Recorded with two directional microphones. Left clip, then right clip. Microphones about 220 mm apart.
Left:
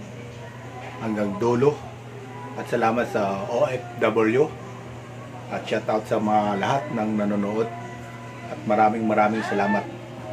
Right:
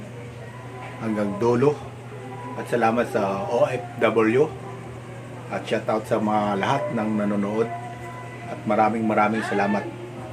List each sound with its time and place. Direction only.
1.0 s a man's voice: centre (ahead or behind)
5.5 s a man's voice: centre (ahead or behind)
8.6 s a man's voice: centre (ahead or behind)